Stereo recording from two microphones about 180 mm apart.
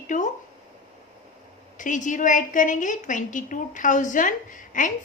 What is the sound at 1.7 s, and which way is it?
A woman's voice, 45° left (ahead or behind).